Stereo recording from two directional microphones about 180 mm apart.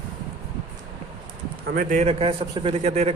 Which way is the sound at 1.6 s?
50° right (ahead or behind).